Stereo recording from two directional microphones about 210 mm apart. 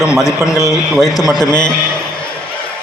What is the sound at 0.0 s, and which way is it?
Speech, 5° right (ahead or behind).